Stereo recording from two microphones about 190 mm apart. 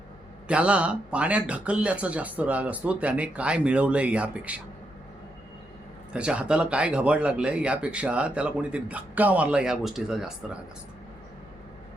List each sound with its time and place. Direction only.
0.4 s speech: 5° right (ahead or behind)
6.1 s speech: 5° right (ahead or behind)